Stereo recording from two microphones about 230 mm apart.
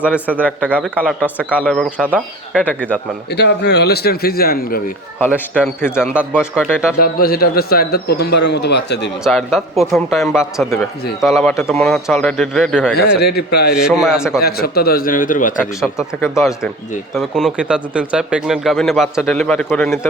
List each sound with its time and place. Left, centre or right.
0.0 s speech: centre
0.8 s speech: centre
1.4 s speech: centre
3.2 s a man's voice: left
5.2 s speech: centre
6.1 s speech: centre
7.0 s a man's voice: left
9.2 s speech: centre
13.0 s a man's voice: left
13.7 s speech: centre
14.4 s a man's voice: left
17.2 s speech: centre